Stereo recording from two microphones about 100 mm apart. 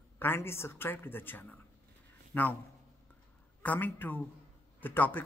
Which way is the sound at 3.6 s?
20° left (ahead or behind).